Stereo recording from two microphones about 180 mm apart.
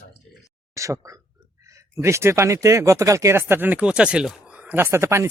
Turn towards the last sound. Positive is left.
turn(degrees=-15)  # may be behind; listen again after turning